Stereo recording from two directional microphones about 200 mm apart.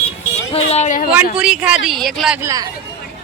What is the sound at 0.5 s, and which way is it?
Speech, 30° left (ahead or behind).